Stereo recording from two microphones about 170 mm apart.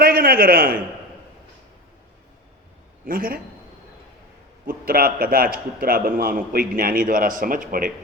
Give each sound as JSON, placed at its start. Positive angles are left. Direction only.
{"t": 0.0, "sound": "a man's voice", "side_deg": -60}
{"t": 3.1, "sound": "a man's voice", "side_deg": -55}
{"t": 4.6, "sound": "a man's voice", "side_deg": -60}